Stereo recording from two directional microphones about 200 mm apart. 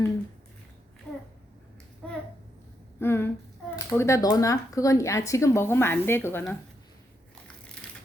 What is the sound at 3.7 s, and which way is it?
Speech, 15° left (ahead or behind).